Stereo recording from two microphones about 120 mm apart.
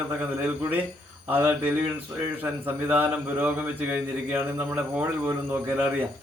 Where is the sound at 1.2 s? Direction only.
15° right (ahead or behind).